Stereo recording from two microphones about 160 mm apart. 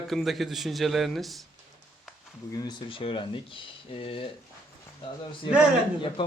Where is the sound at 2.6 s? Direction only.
35° left (ahead or behind).